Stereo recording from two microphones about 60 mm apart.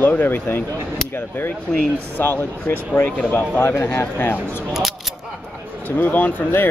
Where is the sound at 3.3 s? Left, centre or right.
Left.